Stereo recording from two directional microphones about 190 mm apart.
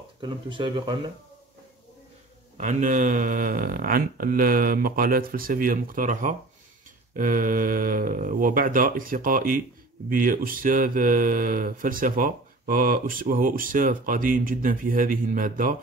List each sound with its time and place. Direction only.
0.2 s speech: 25° right (ahead or behind)
2.5 s speech: 40° right (ahead or behind)